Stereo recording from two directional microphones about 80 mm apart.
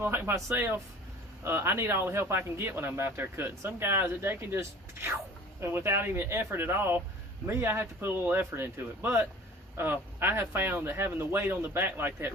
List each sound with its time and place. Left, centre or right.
0.0 s speech: right